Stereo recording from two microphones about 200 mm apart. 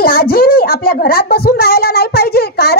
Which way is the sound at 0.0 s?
50° left (ahead or behind).